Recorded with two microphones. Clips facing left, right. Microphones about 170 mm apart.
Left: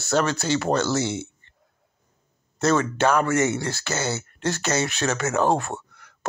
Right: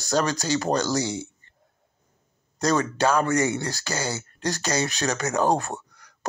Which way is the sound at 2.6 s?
35° right (ahead or behind).